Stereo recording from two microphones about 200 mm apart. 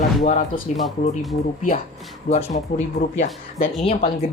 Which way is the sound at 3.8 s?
30° left (ahead or behind).